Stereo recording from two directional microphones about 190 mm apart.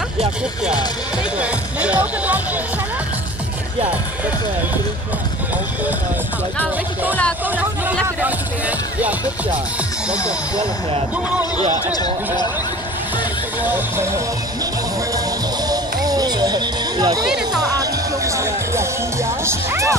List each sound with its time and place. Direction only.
1.4 s speech: 5° right (ahead or behind)
7.4 s speech: 10° right (ahead or behind)
13.6 s speech: 10° right (ahead or behind)
15.7 s music: 20° right (ahead or behind)
17.3 s music: 5° right (ahead or behind)
17.7 s speech: 15° right (ahead or behind)